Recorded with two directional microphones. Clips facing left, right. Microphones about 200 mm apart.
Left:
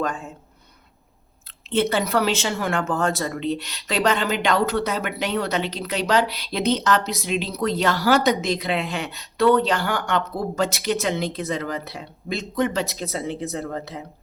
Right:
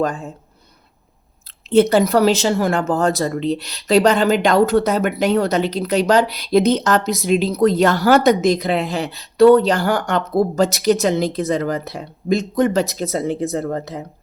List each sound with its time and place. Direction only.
1.7 s speech: 40° right (ahead or behind)